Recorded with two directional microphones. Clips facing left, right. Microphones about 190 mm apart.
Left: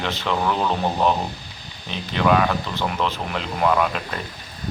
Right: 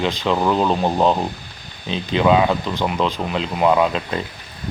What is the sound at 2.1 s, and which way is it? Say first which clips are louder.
Speech: right 3 dB; 20° right (ahead or behind).